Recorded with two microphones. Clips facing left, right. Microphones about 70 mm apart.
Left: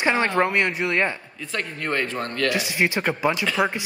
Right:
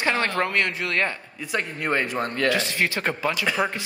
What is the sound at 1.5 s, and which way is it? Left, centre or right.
Speech, centre.